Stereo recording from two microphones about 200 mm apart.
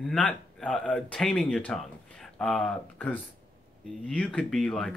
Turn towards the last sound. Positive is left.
turn(degrees=0)  # may be behind; listen again after turning